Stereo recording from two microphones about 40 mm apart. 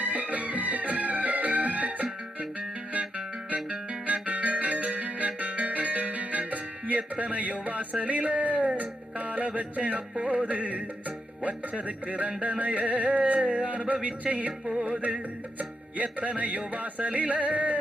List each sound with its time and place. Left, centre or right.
0.0 s music: right
8.0 s a sound: right
15.5 s music: right